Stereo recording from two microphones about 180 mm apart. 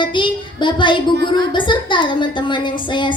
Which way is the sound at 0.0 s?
25° left (ahead or behind).